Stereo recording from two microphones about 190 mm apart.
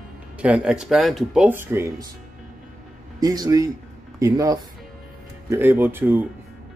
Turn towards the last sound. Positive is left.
turn(degrees=-10)  # may be behind; listen again after turning